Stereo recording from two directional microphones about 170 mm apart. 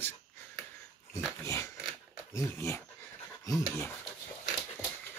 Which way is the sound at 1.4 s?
15° left (ahead or behind).